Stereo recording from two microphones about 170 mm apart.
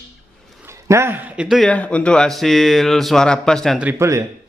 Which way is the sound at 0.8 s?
15° right (ahead or behind).